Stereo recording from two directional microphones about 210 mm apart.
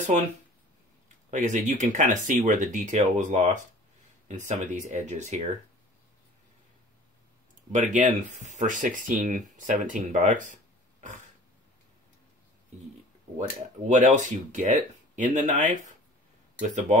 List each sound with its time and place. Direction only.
1.0 s speech: 35° right (ahead or behind)
7.7 s speech: 35° right (ahead or behind)
13.4 s speech: 35° right (ahead or behind)